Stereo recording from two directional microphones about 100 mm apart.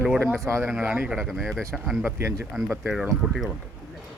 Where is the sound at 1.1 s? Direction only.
Centre (ahead or behind).